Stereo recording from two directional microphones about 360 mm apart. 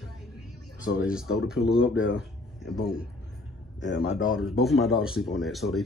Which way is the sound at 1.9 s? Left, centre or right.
Left.